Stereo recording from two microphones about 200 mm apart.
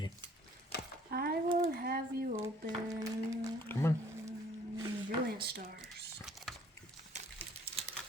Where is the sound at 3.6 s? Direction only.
10° left (ahead or behind).